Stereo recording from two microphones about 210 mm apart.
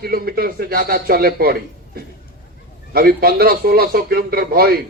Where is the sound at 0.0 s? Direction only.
45° right (ahead or behind).